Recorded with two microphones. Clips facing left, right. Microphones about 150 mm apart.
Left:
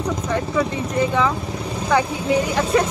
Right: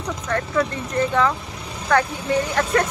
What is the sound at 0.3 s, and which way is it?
Speech, 5° left (ahead or behind).